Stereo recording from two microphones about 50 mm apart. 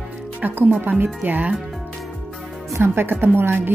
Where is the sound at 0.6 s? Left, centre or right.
Right.